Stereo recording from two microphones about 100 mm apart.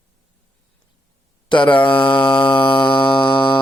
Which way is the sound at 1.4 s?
55° left (ahead or behind).